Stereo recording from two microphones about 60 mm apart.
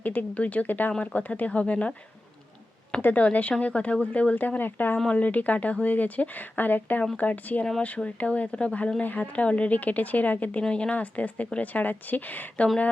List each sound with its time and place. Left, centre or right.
0.0 s speech: left
3.0 s speech: left
10.6 s speech: centre